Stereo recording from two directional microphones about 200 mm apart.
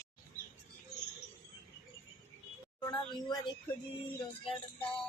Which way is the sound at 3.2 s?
20° left (ahead or behind).